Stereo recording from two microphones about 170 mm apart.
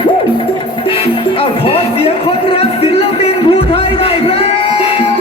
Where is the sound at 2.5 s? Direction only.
35° left (ahead or behind).